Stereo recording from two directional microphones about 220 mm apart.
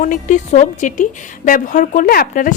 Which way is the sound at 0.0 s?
35° left (ahead or behind).